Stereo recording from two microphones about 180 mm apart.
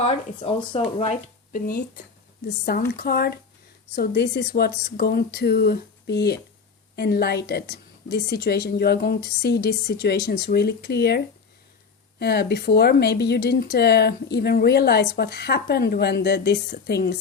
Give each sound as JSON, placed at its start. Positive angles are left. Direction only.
{"t": 0.0, "sound": "speech", "side_deg": 30}
{"t": 1.5, "sound": "speech", "side_deg": 55}
{"t": 2.9, "sound": "speech", "side_deg": 60}
{"t": 12.2, "sound": "speech", "side_deg": 60}